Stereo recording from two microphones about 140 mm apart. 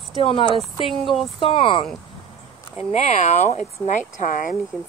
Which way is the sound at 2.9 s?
55° left (ahead or behind).